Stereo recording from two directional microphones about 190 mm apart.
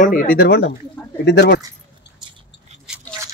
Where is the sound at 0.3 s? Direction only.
55° left (ahead or behind).